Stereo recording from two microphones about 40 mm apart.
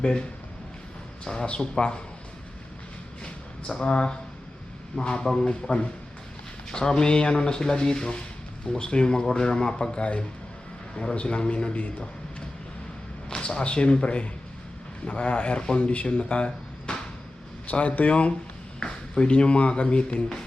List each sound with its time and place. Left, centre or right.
0.0 s speech: left
3.7 s speech: left
10.0 s a man's voice: left
13.3 s speech: left
15.8 s speech: left
17.7 s a man's voice: left
18.8 s speech: left